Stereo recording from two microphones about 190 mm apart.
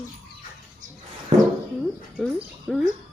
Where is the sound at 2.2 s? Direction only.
Centre (ahead or behind).